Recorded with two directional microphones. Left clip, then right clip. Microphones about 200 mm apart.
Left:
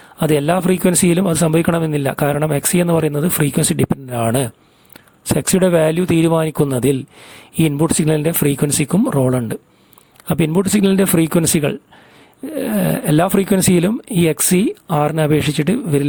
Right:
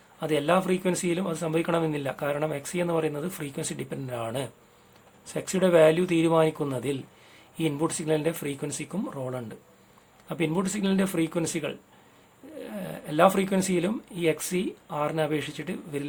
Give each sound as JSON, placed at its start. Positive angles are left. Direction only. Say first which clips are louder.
{"t": 0.2, "sound": "a man's voice", "louder": "left 8 dB", "side_deg": 50}